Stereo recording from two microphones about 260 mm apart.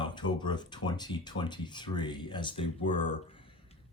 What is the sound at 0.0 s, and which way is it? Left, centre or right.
Speech, centre.